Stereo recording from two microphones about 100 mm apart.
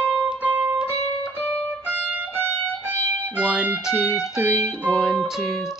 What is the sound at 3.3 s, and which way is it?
Music, 10° right (ahead or behind).